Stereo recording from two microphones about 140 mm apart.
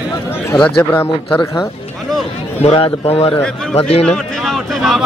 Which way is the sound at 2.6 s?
40° left (ahead or behind).